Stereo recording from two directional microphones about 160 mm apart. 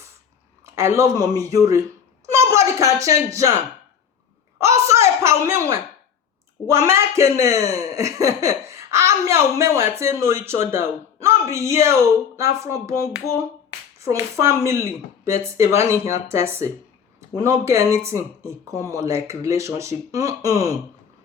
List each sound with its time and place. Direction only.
0.6 s speech: 15° right (ahead or behind)
4.6 s a woman's voice: 20° right (ahead or behind)